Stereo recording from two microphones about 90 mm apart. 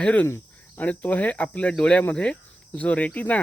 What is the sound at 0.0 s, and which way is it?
Speech, 15° left (ahead or behind).